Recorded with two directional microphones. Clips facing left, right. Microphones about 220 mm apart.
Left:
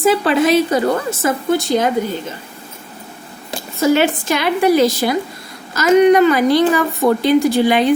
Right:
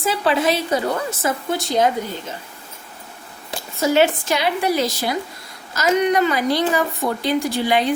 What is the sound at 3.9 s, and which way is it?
A woman's voice, 55° left (ahead or behind).